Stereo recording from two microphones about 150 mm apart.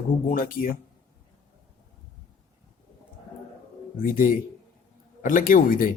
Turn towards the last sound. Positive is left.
turn(degrees=70)  # may be behind; listen again after turning